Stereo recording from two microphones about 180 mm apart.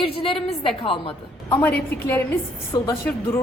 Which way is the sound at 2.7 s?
25° left (ahead or behind).